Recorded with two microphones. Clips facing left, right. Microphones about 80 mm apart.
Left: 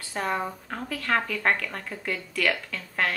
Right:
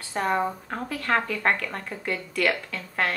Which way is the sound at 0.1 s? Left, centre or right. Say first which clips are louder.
Right 4 dB; right.